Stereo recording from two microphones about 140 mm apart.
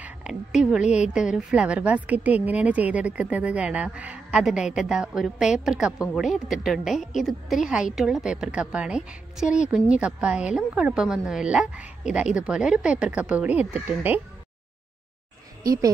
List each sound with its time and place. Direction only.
0.0 s a woman's voice: 5° right (ahead or behind)
0.8 s speech: 55° left (ahead or behind)
1.1 s a woman's voice: 5° right (ahead or behind)
15.6 s a woman's voice: 25° right (ahead or behind)